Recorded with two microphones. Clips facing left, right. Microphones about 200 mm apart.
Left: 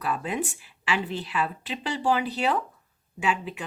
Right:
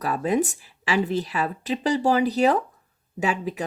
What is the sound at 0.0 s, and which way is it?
Speech, 40° right (ahead or behind).